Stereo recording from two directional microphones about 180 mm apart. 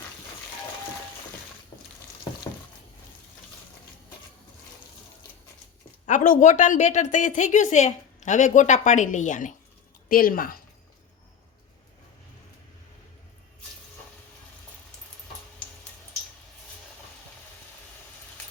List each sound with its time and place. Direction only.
6.1 s speech: 45° left (ahead or behind)